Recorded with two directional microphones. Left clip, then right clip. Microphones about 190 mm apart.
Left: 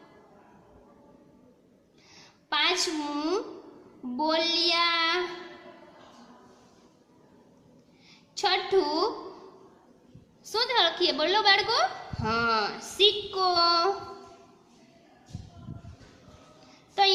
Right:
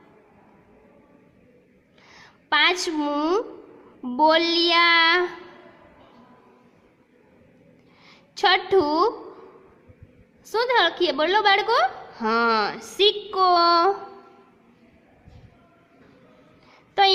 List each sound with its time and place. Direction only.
2.0 s a sound: 40° right (ahead or behind)
4.0 s a woman's voice: 45° right (ahead or behind)
8.0 s a woman's voice: 40° right (ahead or behind)
10.5 s a woman's voice: 40° right (ahead or behind)
16.9 s child singing: 40° right (ahead or behind)